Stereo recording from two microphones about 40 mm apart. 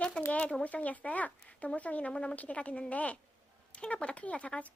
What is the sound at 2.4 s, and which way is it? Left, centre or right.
A child's voice, left.